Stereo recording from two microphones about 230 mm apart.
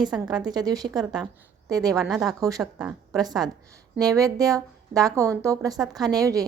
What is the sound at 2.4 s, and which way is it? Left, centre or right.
Speech, centre.